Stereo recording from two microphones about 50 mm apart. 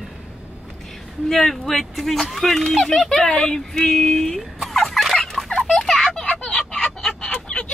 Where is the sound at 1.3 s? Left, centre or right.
Centre.